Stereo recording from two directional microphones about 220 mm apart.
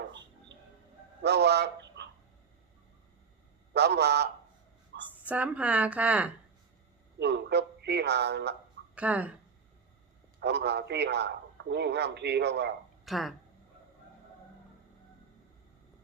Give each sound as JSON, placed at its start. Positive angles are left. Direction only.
{"t": 1.2, "sound": "speech", "side_deg": -50}
{"t": 3.7, "sound": "a man's voice", "side_deg": -50}
{"t": 5.2, "sound": "a woman's voice", "side_deg": -5}
{"t": 7.2, "sound": "a man's voice", "side_deg": -50}
{"t": 9.0, "sound": "a woman's voice", "side_deg": -5}
{"t": 10.4, "sound": "a man's voice", "side_deg": -50}
{"t": 13.1, "sound": "speech", "side_deg": 0}